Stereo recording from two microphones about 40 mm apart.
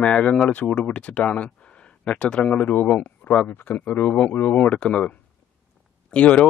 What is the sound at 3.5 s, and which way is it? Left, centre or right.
Speech, left.